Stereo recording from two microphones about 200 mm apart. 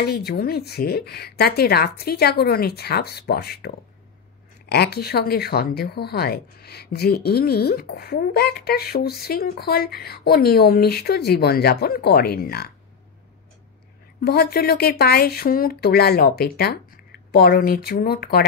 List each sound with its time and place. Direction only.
0.0 s speech: 50° left (ahead or behind)
14.2 s speech: 50° left (ahead or behind)